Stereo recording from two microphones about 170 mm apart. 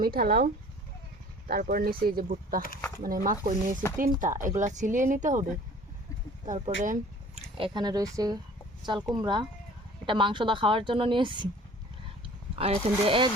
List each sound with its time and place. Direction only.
0.0 s speech: 60° right (ahead or behind)
6.5 s speech: 50° right (ahead or behind)
7.6 s a woman's voice: 25° right (ahead or behind)
12.5 s speech: 35° right (ahead or behind)